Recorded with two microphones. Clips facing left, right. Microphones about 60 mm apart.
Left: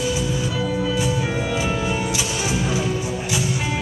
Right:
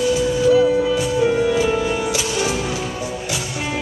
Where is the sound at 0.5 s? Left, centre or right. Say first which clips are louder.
Right 9 dB; centre.